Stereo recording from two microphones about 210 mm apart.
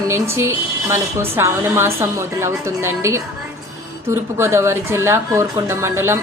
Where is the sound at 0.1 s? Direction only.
10° right (ahead or behind).